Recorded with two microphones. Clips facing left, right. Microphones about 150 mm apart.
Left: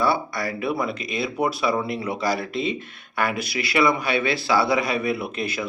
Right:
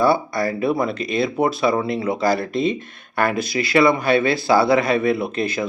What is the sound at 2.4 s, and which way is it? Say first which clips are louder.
Speech: right 5 dB; 45° right (ahead or behind).